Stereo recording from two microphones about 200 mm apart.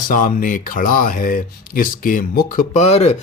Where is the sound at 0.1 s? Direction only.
45° left (ahead or behind).